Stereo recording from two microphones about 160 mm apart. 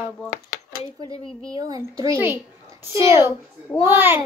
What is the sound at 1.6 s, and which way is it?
Speech, 20° right (ahead or behind).